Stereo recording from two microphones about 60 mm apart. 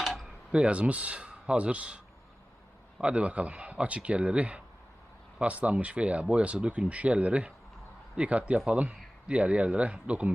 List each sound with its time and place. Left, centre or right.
0.0 s tick-tock: centre
0.5 s speech: centre
3.0 s speech: centre